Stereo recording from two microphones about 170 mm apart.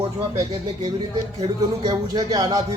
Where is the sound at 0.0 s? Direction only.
25° right (ahead or behind).